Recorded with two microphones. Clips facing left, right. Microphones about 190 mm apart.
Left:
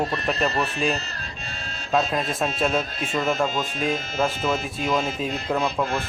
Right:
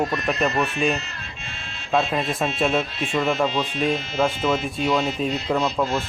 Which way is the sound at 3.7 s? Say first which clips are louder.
Right 3 dB; 45° left (ahead or behind).